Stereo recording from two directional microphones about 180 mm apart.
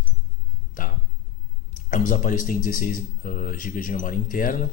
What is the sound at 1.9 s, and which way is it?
Speech, 45° left (ahead or behind).